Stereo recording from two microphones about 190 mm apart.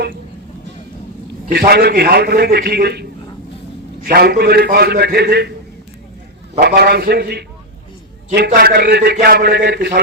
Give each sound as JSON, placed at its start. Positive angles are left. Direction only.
{"t": 1.5, "sound": "a man's voice", "side_deg": -55}
{"t": 6.6, "sound": "a man's voice", "side_deg": -55}